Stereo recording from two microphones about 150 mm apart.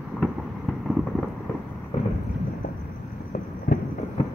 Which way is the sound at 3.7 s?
90° left.